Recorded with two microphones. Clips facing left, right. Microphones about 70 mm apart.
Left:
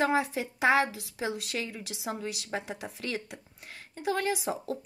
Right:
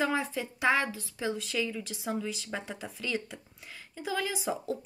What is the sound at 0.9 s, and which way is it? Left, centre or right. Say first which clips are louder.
A woman's voice: even; left.